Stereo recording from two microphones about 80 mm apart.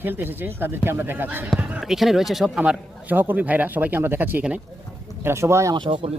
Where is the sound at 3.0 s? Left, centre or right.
Right.